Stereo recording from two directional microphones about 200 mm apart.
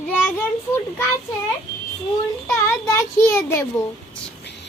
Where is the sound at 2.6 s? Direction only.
15° left (ahead or behind).